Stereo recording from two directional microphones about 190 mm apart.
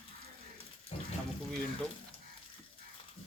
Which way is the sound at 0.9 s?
35° left (ahead or behind).